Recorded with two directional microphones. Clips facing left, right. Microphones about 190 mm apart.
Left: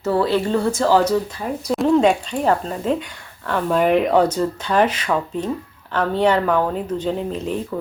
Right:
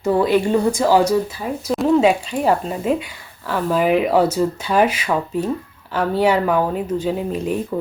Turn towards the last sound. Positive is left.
turn(degrees=-10)  # may be behind; listen again after turning